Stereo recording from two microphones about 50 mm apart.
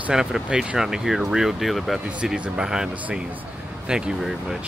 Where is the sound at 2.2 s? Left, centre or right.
Centre.